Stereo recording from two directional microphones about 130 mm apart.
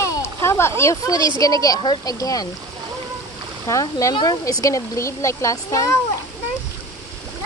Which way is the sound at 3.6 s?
25° left (ahead or behind).